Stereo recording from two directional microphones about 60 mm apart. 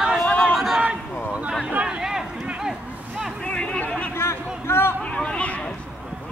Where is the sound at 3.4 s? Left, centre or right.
Centre.